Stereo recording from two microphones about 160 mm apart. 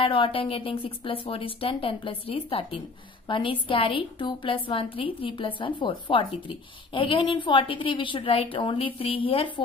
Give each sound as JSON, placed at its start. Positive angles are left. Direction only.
{"t": 0.0, "sound": "a woman's voice", "side_deg": 35}